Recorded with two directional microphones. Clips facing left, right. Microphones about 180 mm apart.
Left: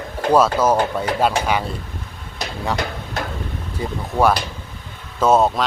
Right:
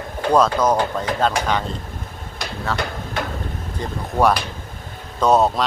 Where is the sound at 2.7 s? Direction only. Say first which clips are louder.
Left 1 dB; 15° left (ahead or behind).